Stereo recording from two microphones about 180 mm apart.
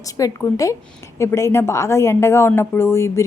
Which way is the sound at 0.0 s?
20° left (ahead or behind).